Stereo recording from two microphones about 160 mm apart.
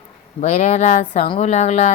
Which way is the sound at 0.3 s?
40° left (ahead or behind).